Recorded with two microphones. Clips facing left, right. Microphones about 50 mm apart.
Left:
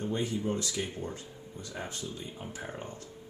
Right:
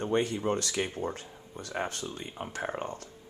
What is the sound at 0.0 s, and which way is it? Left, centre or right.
Speech, right.